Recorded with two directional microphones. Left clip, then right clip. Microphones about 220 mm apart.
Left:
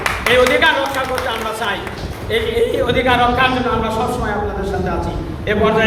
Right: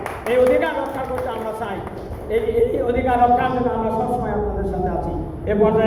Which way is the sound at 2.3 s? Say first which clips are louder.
Left 2 dB; 10° left (ahead or behind).